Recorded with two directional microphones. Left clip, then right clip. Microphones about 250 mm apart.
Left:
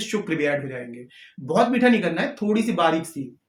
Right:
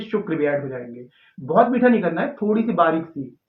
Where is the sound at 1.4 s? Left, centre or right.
Left.